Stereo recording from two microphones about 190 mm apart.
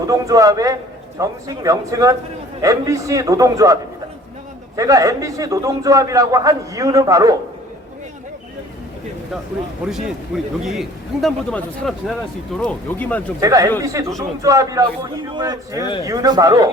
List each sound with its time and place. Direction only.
0.1 s a man's voice: 15° right (ahead or behind)
4.8 s a man's voice: 15° right (ahead or behind)
9.8 s a man's voice: centre (ahead or behind)
13.4 s a man's voice: 15° right (ahead or behind)